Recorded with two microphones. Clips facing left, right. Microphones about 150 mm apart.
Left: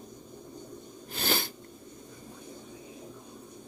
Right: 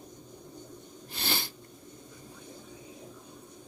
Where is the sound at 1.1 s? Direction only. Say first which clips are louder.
Left 4 dB; 50° left (ahead or behind).